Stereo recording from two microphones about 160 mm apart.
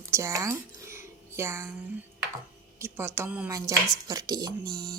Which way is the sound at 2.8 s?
15° right (ahead or behind).